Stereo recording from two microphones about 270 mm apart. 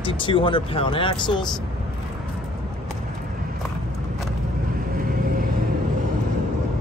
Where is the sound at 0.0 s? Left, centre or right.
Centre.